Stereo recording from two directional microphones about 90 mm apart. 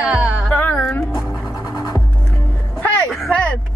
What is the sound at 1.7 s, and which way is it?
Music, 45° left (ahead or behind).